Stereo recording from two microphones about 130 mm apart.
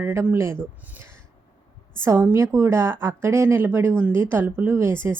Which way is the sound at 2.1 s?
20° right (ahead or behind).